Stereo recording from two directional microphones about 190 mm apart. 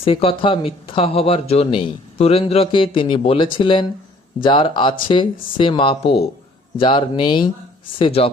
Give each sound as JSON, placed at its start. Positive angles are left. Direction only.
{"t": 0.0, "sound": "speech", "side_deg": 30}